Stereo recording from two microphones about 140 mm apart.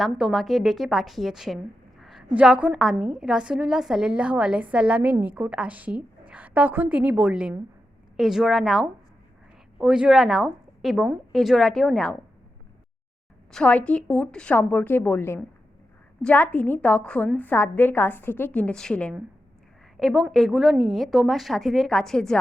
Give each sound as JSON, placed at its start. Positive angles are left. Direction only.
{"t": 0.0, "sound": "a woman's voice", "side_deg": 0}
{"t": 13.5, "sound": "a woman's voice", "side_deg": 10}